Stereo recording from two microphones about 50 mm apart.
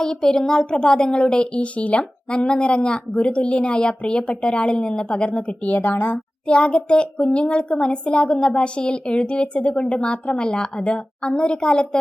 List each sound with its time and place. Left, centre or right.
0.0 s a woman's voice: centre